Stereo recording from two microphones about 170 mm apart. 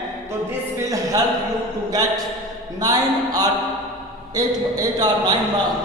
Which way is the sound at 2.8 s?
20° right (ahead or behind).